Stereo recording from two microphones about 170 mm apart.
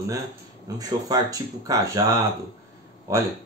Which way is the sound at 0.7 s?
20° right (ahead or behind).